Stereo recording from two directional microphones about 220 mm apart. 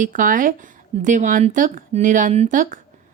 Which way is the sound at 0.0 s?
35° right (ahead or behind).